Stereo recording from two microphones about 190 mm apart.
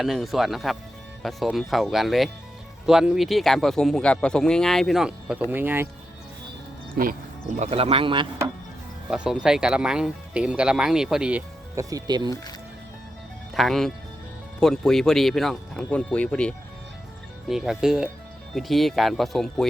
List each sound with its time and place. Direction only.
0.0 s speech: centre (ahead or behind)
6.9 s speech: 45° right (ahead or behind); by 8.3 s 25° right (ahead or behind)
9.0 s speech: 5° right (ahead or behind); by 12.3 s 20° right (ahead or behind)
13.5 s speech: centre (ahead or behind)